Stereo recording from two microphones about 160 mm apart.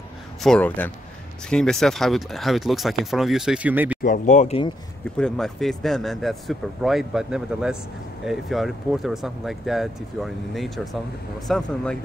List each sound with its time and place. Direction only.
0.4 s speech: 5° left (ahead or behind); by 4.0 s 10° right (ahead or behind)
4.0 s speech: 55° left (ahead or behind)
5.1 s speech: 5° left (ahead or behind)